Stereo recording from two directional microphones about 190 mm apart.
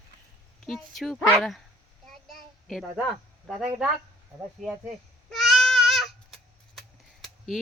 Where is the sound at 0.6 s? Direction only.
Centre (ahead or behind).